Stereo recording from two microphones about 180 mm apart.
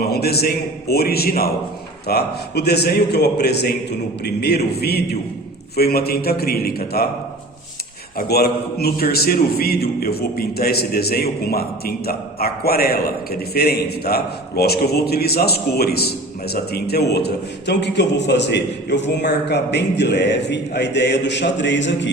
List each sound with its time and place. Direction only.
0.0 s a man's voice: 60° left (ahead or behind)
8.2 s a man's voice: 60° left (ahead or behind); by 22.1 s 80° left